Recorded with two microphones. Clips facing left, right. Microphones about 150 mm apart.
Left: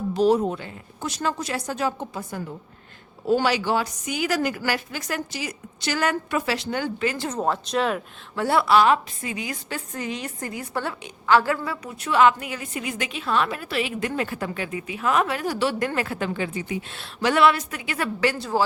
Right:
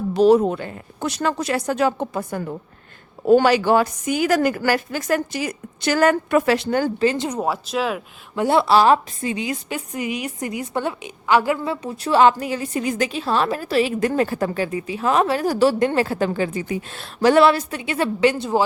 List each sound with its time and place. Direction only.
0.1 s a woman's voice: 70° right (ahead or behind); by 6.9 s 45° right (ahead or behind)
7.0 s speech: 30° right (ahead or behind)
7.3 s speech: 10° right (ahead or behind)
8.4 s a woman's voice: 20° right (ahead or behind); by 15.7 s 40° right (ahead or behind)
15.8 s a woman's voice: 30° right (ahead or behind)